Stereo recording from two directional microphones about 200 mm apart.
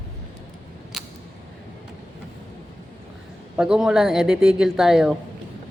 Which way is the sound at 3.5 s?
5° right (ahead or behind).